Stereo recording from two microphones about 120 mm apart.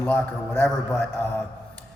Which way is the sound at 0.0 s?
10° left (ahead or behind).